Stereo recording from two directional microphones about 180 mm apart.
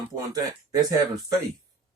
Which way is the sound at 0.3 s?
20° right (ahead or behind).